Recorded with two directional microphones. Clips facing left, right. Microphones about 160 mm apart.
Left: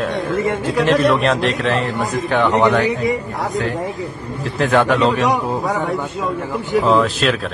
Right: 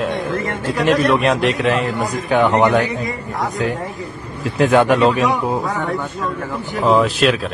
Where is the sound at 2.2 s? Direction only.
15° right (ahead or behind).